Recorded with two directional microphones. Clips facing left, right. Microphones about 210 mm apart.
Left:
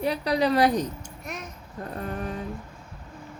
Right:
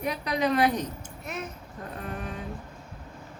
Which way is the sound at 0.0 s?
35° left (ahead or behind).